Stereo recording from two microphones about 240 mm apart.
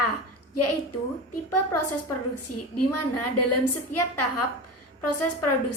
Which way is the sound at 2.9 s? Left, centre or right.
Left.